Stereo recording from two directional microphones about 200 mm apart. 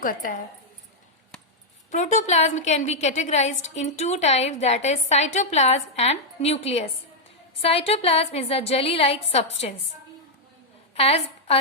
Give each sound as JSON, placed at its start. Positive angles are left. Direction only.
{"t": 0.0, "sound": "speech", "side_deg": 45}
{"t": 1.9, "sound": "a woman's voice", "side_deg": 35}
{"t": 10.9, "sound": "a woman's voice", "side_deg": 30}